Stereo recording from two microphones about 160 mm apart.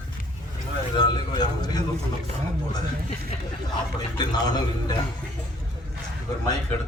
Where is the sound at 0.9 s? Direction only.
25° left (ahead or behind).